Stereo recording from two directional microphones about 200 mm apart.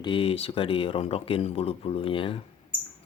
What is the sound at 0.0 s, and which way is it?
Speech, 25° left (ahead or behind).